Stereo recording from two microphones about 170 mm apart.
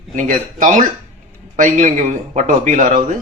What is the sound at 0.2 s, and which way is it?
Speech, 50° right (ahead or behind).